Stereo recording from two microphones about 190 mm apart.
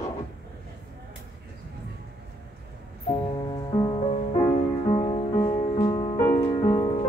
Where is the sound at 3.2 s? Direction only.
25° left (ahead or behind).